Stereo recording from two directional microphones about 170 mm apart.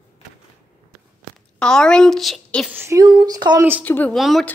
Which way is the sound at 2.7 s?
15° right (ahead or behind).